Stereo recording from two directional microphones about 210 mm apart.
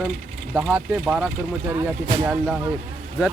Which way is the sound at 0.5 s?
5° right (ahead or behind).